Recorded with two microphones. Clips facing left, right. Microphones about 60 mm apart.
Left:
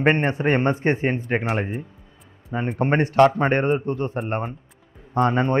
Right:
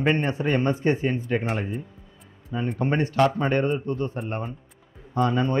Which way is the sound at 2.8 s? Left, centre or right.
Left.